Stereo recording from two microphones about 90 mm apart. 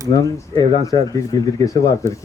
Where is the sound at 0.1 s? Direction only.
40° left (ahead or behind).